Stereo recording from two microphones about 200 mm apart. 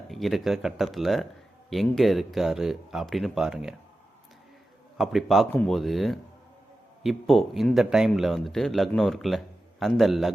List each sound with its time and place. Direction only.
0.1 s speech: centre (ahead or behind)
4.9 s speech: centre (ahead or behind)